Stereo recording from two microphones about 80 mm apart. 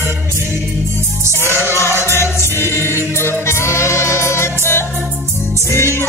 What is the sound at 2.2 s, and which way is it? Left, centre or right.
Music, left.